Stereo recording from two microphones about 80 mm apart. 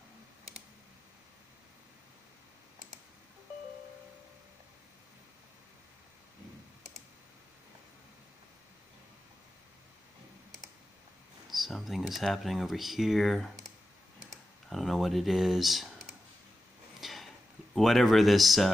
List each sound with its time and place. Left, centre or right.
11.5 s speech: centre
17.0 s a sound: centre
17.7 s speech: centre